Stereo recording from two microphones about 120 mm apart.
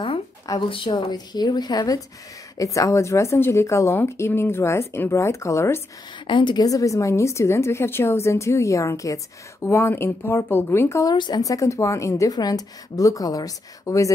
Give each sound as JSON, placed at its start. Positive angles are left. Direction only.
{"t": 0.6, "sound": "a woman's voice", "side_deg": 45}
{"t": 6.2, "sound": "a woman's voice", "side_deg": 40}
{"t": 11.1, "sound": "a woman's voice", "side_deg": 35}